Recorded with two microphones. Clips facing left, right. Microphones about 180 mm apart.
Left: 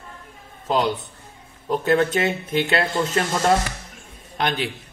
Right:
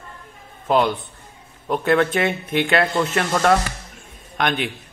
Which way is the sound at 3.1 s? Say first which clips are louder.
Right 2 dB; 25° left (ahead or behind).